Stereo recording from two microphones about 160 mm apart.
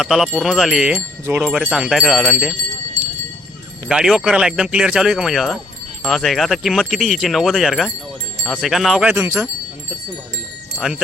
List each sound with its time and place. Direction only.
0.0 s speech: centre (ahead or behind)
3.8 s speech: 5° right (ahead or behind)
9.1 s wind chime: 15° right (ahead or behind)